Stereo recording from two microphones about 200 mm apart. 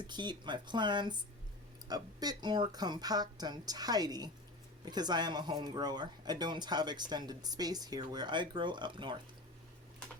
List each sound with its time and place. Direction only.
0.1 s speech: 20° right (ahead or behind)